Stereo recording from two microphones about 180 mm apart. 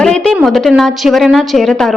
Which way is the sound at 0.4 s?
Centre (ahead or behind).